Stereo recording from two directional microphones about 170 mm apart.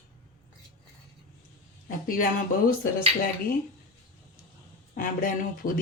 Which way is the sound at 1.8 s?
55° left (ahead or behind).